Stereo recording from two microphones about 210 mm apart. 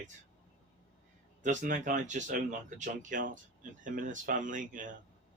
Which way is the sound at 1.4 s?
35° right (ahead or behind).